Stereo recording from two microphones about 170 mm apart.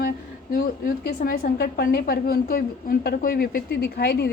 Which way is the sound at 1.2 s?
55° left (ahead or behind).